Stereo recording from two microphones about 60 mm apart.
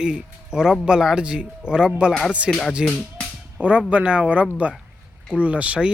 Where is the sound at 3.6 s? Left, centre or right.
Right.